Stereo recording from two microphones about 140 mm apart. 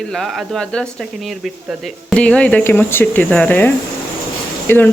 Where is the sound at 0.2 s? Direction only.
5° left (ahead or behind).